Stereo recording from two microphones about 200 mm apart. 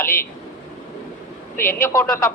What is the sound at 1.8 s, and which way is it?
Speech, 5° left (ahead or behind).